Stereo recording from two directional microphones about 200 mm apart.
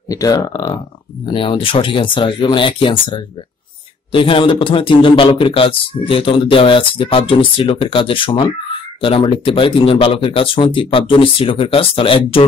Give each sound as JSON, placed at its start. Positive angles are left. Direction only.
{"t": 0.1, "sound": "speech", "side_deg": 15}